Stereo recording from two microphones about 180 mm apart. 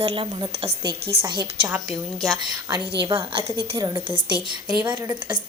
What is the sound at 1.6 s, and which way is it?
Speech, 5° right (ahead or behind).